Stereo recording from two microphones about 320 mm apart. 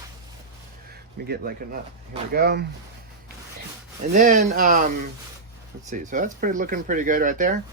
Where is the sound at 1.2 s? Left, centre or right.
Right.